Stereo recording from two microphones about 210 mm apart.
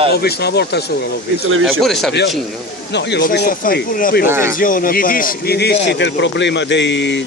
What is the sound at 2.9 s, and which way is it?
Speech, 55° left (ahead or behind).